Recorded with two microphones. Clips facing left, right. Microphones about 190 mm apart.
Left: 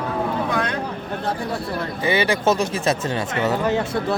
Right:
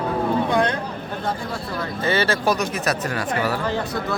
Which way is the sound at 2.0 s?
15° left (ahead or behind).